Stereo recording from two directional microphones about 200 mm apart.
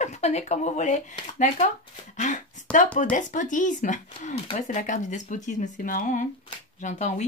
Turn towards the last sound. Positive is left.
turn(degrees=35)  # may be behind; listen again after turning